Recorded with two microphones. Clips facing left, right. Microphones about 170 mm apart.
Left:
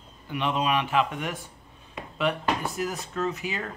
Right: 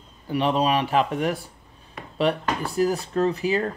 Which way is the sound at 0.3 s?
35° right (ahead or behind).